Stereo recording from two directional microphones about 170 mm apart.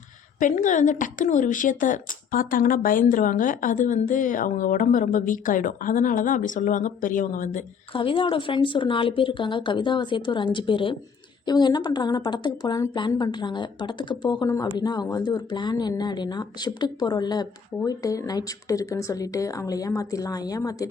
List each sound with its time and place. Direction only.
0.3 s a woman's voice: 50° left (ahead or behind)
7.9 s a woman's voice: 30° left (ahead or behind)